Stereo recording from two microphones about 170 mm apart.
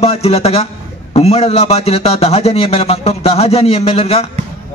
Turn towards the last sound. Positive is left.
turn(degrees=35)  # may be behind; listen again after turning